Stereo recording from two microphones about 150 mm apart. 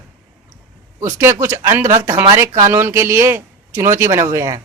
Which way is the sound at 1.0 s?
20° right (ahead or behind).